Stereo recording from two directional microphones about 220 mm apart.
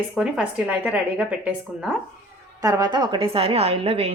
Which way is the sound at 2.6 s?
15° right (ahead or behind).